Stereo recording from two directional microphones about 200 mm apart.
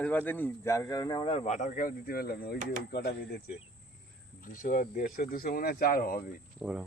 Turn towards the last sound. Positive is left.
turn(degrees=-5)  # may be behind; listen again after turning